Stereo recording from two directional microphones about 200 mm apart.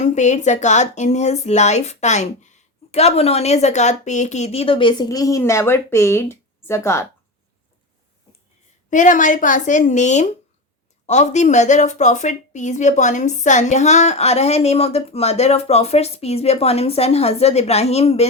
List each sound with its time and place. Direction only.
0.0 s a woman's voice: 35° left (ahead or behind); by 7.1 s 15° left (ahead or behind)
8.9 s a woman's voice: 40° left (ahead or behind)